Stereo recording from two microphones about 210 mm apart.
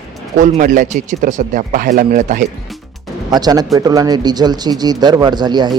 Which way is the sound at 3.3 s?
20° right (ahead or behind).